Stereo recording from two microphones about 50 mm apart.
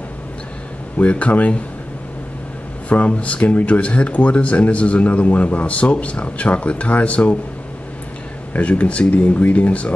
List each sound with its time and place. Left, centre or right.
0.9 s speech: left
2.9 s speech: left
8.5 s speech: left